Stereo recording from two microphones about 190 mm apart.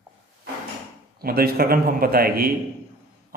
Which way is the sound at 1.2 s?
50° right (ahead or behind).